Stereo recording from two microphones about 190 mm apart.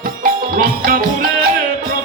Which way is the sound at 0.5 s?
50° right (ahead or behind).